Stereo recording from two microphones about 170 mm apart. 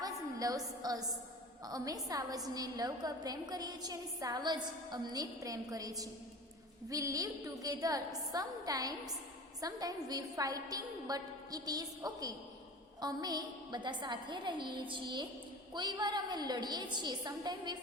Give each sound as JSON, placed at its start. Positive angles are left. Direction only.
{"t": 0.0, "sound": "a woman's voice", "side_deg": -20}